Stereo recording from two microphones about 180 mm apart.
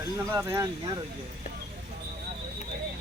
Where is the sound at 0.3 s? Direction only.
15° right (ahead or behind).